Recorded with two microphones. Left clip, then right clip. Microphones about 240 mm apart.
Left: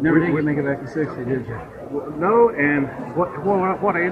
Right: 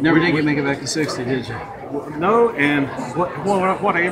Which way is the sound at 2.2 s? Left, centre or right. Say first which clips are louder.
Even; right.